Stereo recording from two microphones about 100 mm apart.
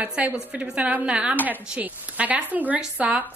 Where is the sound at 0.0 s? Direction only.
15° right (ahead or behind).